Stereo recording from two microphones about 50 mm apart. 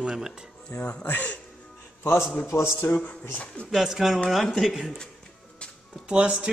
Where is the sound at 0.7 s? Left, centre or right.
Left.